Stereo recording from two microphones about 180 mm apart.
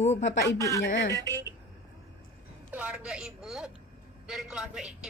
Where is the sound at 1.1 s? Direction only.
15° right (ahead or behind).